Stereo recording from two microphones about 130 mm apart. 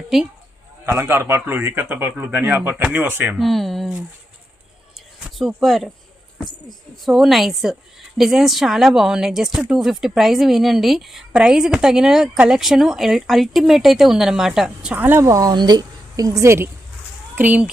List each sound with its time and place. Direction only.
0.1 s speech: 5° right (ahead or behind)
0.9 s a man's voice: 20° right (ahead or behind)
3.3 s speech: centre (ahead or behind)
4.9 s a sound: centre (ahead or behind)
6.7 s a man's voice: centre (ahead or behind)